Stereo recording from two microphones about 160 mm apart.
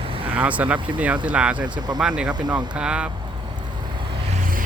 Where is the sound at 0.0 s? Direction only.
35° right (ahead or behind).